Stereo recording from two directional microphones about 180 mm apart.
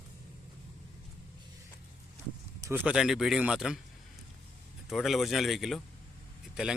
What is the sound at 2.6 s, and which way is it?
Speech, 10° right (ahead or behind).